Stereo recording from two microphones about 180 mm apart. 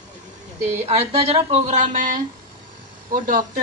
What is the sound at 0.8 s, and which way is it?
Speech, 35° right (ahead or behind).